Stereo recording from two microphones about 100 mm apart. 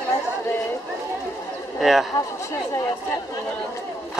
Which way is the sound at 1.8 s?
Centre (ahead or behind).